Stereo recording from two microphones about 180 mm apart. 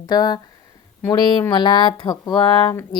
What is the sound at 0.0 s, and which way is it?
Speech, 20° left (ahead or behind).